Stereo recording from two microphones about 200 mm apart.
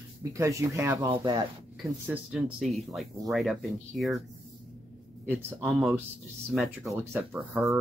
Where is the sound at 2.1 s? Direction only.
5° right (ahead or behind).